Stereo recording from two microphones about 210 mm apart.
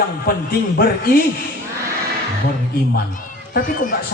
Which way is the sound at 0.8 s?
45° left (ahead or behind).